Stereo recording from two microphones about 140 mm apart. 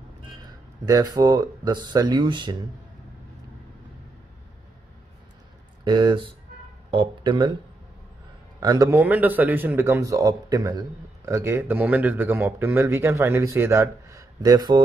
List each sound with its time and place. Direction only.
0.8 s speech: 25° right (ahead or behind)
5.9 s speech: 35° right (ahead or behind)
8.5 s a man's voice: 25° right (ahead or behind)